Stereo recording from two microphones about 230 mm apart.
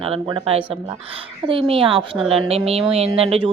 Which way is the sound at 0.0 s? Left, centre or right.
Right.